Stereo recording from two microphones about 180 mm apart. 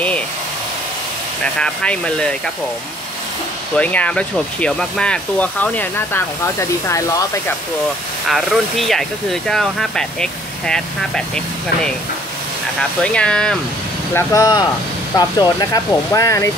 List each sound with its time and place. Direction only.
1.4 s speech: 5° left (ahead or behind)
3.7 s speech: 5° left (ahead or behind)
8.3 s speech: centre (ahead or behind)
13.0 s speech: 5° left (ahead or behind)
14.1 s speech: 20° left (ahead or behind)